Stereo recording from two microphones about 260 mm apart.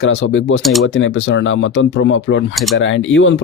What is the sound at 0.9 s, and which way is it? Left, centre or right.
Speech, left.